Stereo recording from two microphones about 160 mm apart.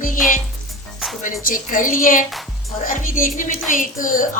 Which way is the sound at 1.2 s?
55° left (ahead or behind).